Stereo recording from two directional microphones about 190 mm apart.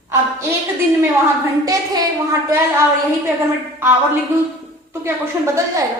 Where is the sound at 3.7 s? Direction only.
10° right (ahead or behind).